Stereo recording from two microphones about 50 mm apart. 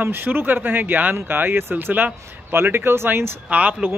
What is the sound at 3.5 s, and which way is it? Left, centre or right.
Speech, right.